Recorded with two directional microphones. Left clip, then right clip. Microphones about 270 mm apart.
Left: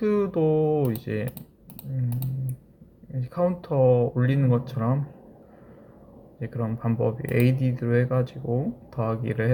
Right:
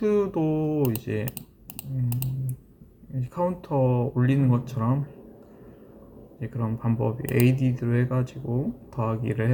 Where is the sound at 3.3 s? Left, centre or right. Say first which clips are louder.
Left 1 dB; centre.